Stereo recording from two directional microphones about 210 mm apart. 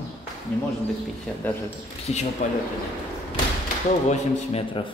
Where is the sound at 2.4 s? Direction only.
35° left (ahead or behind).